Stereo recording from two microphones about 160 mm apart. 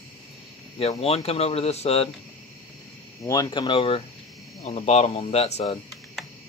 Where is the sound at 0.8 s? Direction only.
40° left (ahead or behind).